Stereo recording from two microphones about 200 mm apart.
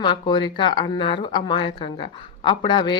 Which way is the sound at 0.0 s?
25° left (ahead or behind).